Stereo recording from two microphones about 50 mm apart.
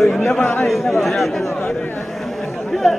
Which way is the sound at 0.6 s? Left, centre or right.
Centre.